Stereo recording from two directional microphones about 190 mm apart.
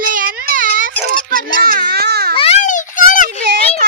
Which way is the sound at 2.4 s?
35° left (ahead or behind).